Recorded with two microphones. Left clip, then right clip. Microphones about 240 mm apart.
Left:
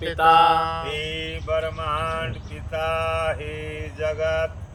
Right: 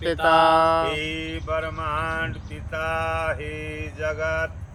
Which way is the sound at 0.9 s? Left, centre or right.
Centre.